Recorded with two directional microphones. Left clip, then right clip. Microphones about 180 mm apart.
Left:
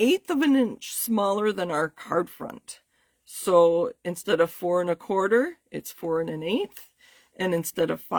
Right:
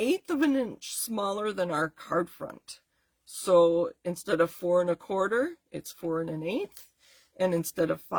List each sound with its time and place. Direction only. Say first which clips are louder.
0.0 s speech: left 4 dB; 50° left (ahead or behind)